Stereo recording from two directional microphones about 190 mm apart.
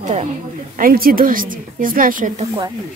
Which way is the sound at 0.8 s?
50° right (ahead or behind).